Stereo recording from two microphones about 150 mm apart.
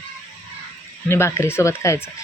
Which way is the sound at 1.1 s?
15° left (ahead or behind).